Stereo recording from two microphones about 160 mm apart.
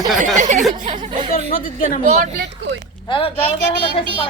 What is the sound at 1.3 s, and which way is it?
Speech, 65° left (ahead or behind).